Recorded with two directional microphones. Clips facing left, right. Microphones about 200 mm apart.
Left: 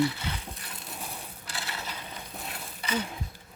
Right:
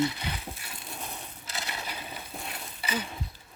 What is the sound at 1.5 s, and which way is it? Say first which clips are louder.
Ratchet: right 1 dB; 20° right (ahead or behind).